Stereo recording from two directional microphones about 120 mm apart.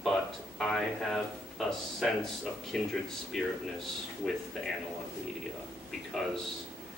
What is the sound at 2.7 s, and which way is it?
A man's voice, 5° left (ahead or behind).